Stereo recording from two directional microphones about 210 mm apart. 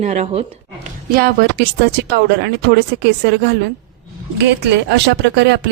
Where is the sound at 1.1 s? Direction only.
50° right (ahead or behind).